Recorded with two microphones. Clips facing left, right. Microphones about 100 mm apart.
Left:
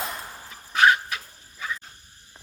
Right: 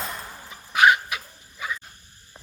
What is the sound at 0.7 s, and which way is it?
Dog, 15° right (ahead or behind).